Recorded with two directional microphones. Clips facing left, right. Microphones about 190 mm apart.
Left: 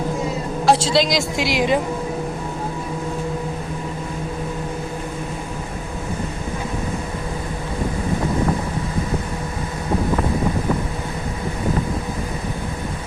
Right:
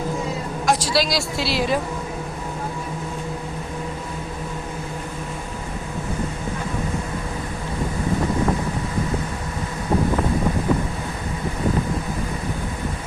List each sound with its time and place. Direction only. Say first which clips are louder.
0.6 s a woman's voice: left 4 dB; 30° left (ahead or behind)